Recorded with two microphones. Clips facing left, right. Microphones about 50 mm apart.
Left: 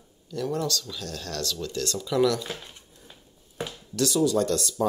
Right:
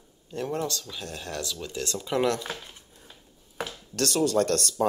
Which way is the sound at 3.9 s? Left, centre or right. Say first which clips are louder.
Left 1 dB; right.